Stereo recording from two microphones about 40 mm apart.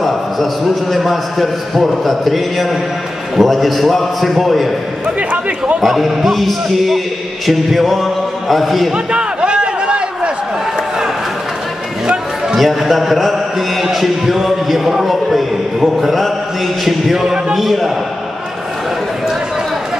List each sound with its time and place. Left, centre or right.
0.9 s a man's voice: centre
5.8 s a man's voice: centre
8.9 s a sound: right
12.5 s music: centre
16.8 s a sound: centre
17.6 s a man's voice: centre